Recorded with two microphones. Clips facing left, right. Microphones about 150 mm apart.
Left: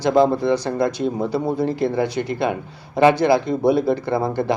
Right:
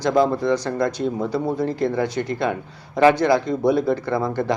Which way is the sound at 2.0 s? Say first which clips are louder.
Left 1 dB; 10° left (ahead or behind).